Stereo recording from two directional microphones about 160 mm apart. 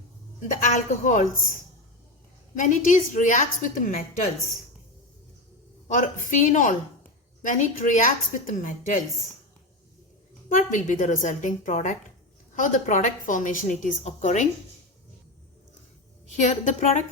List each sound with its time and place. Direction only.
0.5 s a woman's voice: 55° left (ahead or behind)
2.6 s a woman's voice: 55° left (ahead or behind)
5.9 s a woman's voice: 55° left (ahead or behind)
10.5 s a woman's voice: 50° left (ahead or behind)
16.4 s a woman's voice: 45° left (ahead or behind)